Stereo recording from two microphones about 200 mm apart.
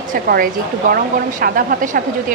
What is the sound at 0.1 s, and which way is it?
Speech, 45° right (ahead or behind).